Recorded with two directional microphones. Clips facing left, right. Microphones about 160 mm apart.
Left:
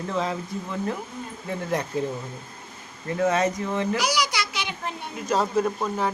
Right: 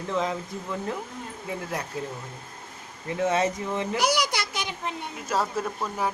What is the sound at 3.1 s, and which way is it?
Speech, 25° right (ahead or behind).